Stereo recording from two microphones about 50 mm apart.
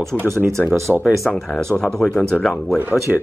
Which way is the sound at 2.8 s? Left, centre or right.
Right.